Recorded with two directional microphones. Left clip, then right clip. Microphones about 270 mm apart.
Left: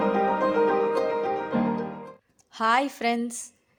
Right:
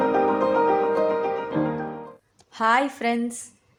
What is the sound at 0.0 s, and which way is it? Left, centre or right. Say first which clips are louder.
Music: right 3 dB; centre.